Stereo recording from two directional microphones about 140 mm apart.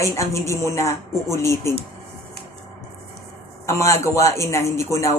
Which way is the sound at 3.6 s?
20° left (ahead or behind).